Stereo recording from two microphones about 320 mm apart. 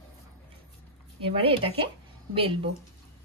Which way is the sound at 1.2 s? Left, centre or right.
Centre.